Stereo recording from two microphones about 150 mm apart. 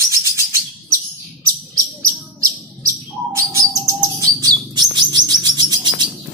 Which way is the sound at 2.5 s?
20° right (ahead or behind).